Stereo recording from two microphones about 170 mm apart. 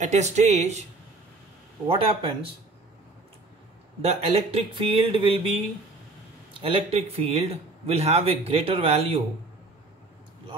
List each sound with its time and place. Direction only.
0.0 s speech: 45° right (ahead or behind)
1.9 s speech: 35° right (ahead or behind)
4.0 s speech: 35° right (ahead or behind)
6.6 s speech: 35° right (ahead or behind)